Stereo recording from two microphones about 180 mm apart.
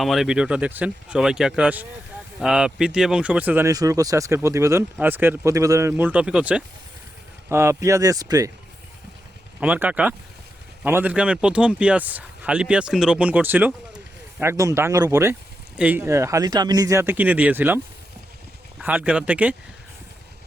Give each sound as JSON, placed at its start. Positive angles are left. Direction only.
{"t": 0.0, "sound": "speech", "side_deg": 0}
{"t": 9.6, "sound": "speech", "side_deg": -10}
{"t": 18.8, "sound": "speech", "side_deg": -10}